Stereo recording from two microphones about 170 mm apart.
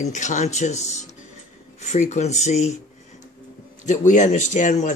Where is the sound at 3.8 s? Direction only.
45° left (ahead or behind).